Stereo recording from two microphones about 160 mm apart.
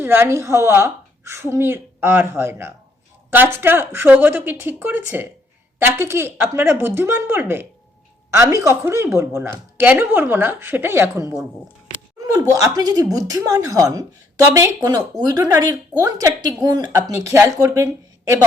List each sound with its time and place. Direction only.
0.0 s a woman's voice: 15° right (ahead or behind)
12.3 s a woman's voice: 20° right (ahead or behind)